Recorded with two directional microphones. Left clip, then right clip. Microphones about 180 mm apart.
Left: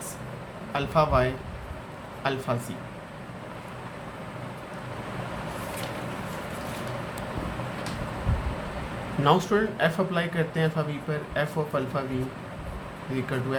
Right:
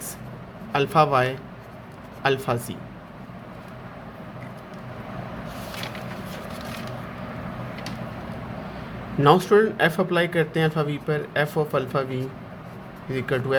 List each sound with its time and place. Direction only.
0.7 s speech: 50° right (ahead or behind)
9.2 s speech: 45° right (ahead or behind)
13.1 s speech: 50° right (ahead or behind)